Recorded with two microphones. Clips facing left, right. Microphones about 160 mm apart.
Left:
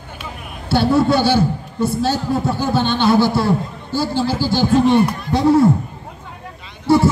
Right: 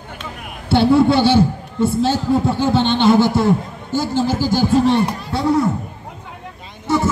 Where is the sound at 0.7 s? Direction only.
25° right (ahead or behind).